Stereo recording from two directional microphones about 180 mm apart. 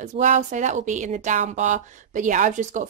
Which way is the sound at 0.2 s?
45° right (ahead or behind).